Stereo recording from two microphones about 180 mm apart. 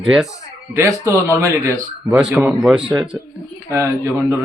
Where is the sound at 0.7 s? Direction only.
15° right (ahead or behind).